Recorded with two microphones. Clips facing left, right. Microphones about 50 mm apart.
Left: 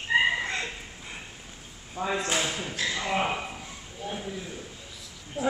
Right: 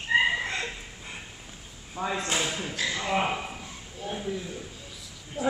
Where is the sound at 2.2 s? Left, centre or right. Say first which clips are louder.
Left 1 dB; left.